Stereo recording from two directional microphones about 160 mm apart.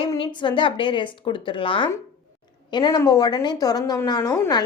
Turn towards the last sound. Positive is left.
turn(degrees=20)  # may be behind; listen again after turning